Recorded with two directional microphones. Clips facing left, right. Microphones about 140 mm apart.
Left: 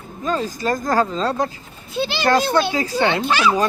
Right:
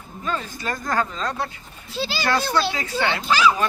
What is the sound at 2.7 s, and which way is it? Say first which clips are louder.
Speech: left 5 dB; 30° left (ahead or behind).